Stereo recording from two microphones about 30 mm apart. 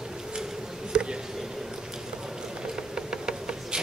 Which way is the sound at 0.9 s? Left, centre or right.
Right.